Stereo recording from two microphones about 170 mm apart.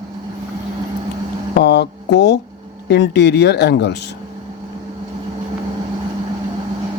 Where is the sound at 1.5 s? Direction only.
80° left.